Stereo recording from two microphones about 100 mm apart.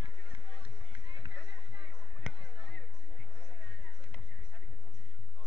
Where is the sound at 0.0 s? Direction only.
60° right (ahead or behind).